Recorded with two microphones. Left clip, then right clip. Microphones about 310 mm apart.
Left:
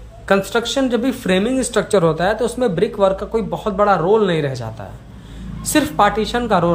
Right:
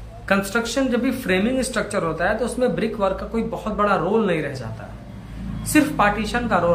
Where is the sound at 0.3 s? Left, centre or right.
Centre.